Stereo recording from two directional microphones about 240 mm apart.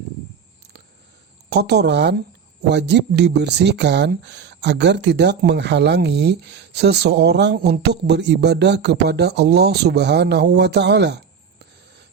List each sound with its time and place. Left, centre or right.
1.5 s speech: right